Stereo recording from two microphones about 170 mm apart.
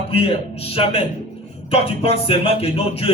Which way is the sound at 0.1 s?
35° left (ahead or behind).